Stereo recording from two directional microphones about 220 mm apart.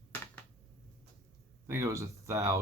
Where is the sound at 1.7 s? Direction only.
15° right (ahead or behind).